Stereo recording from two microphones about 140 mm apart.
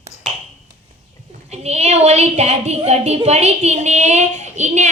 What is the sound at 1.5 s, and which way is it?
A woman's voice, 50° right (ahead or behind).